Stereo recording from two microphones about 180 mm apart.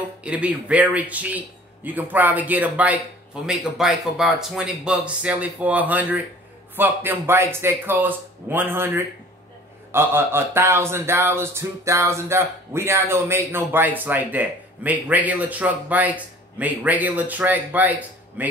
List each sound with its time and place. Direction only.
0.2 s speech: 5° right (ahead or behind)